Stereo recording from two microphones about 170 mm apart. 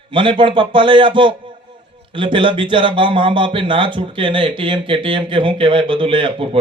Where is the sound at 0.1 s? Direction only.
30° right (ahead or behind).